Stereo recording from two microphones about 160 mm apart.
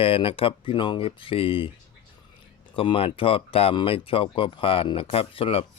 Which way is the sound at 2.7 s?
35° left (ahead or behind).